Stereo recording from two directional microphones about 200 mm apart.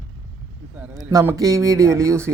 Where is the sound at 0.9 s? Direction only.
15° right (ahead or behind).